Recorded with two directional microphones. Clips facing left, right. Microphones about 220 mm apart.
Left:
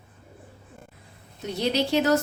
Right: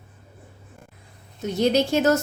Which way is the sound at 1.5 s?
45° right (ahead or behind).